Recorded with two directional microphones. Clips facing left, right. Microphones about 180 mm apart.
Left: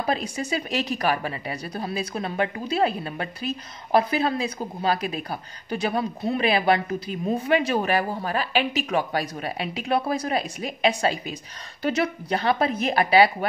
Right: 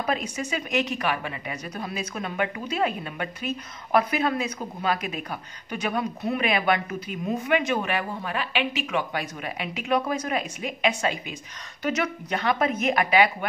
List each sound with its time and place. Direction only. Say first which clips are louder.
0.0 s a woman's voice: left 1 dB; 35° left (ahead or behind)